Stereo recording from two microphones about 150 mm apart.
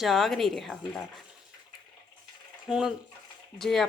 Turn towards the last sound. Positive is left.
turn(degrees=0)  # may be behind; listen again after turning